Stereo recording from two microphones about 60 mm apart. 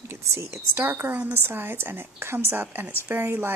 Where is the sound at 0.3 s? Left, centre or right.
Right.